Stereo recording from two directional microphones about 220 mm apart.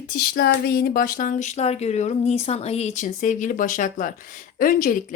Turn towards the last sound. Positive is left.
turn(degrees=40)  # may be behind; listen again after turning